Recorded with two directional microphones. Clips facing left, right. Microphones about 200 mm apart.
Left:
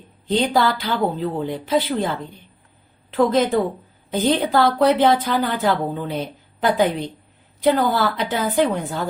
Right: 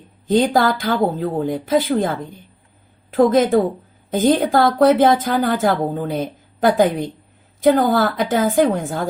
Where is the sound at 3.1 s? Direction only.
50° right (ahead or behind).